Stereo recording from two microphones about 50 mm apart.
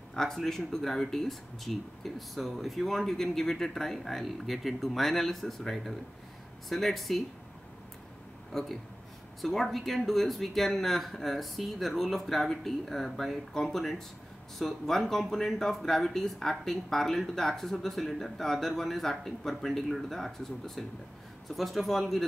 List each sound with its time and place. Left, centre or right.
0.1 s speech: centre
8.5 s speech: centre